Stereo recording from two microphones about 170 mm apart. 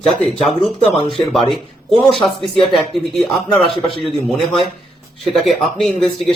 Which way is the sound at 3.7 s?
30° left (ahead or behind).